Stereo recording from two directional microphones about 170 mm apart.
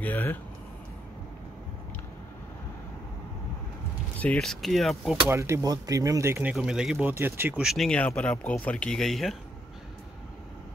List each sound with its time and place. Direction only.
0.0 s speech: 10° left (ahead or behind)
4.2 s speech: 5° left (ahead or behind)
5.3 s speech: 15° right (ahead or behind)
6.5 s speech: 5° right (ahead or behind)